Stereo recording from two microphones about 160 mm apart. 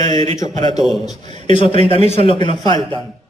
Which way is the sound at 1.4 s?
35° left (ahead or behind).